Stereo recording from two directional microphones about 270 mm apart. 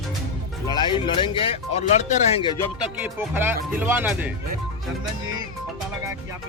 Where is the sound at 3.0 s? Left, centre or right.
Centre.